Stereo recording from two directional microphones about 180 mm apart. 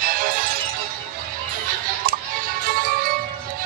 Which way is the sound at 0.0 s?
50° right (ahead or behind).